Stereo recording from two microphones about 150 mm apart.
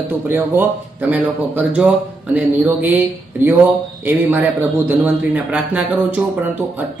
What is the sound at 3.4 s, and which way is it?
Speech, 15° right (ahead or behind).